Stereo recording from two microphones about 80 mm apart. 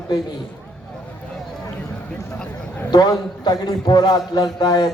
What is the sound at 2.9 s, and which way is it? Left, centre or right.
A man's voice, left.